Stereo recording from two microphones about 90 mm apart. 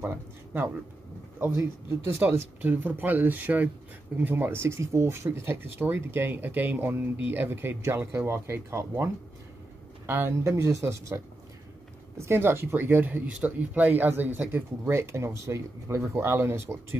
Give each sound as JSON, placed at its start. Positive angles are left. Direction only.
{"t": 0.0, "sound": "speech", "side_deg": -25}